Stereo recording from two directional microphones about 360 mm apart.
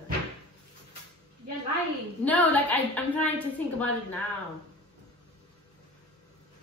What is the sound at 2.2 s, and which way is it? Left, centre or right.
A woman's voice, centre.